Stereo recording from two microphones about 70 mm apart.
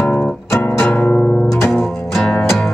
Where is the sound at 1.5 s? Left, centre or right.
Centre.